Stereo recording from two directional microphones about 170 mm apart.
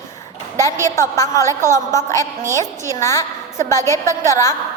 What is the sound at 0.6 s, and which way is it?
A woman's voice, 15° left (ahead or behind).